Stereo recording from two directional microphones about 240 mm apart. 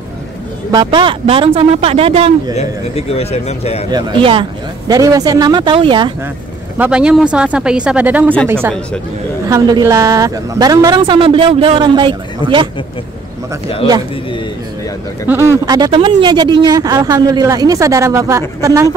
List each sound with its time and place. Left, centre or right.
0.7 s a woman's voice: centre
2.5 s a man's voice: left
3.9 s a woman's voice: right
6.8 s speech: centre
9.5 s a woman's voice: centre
15.2 s speech: centre